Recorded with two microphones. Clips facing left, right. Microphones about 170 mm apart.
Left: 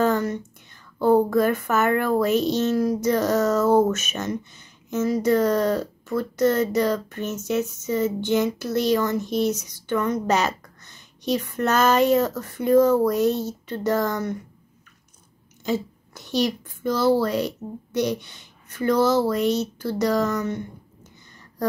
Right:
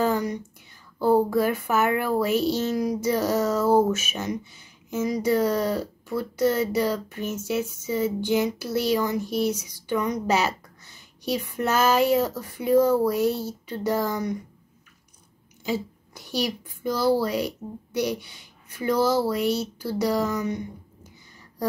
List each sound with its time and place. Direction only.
0.0 s whispering: 10° right (ahead or behind)
0.9 s speech: 10° right (ahead or behind)
15.6 s speech: 10° right (ahead or behind)